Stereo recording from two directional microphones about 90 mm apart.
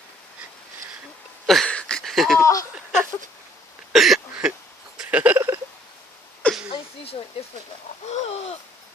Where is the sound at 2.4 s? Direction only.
40° left (ahead or behind).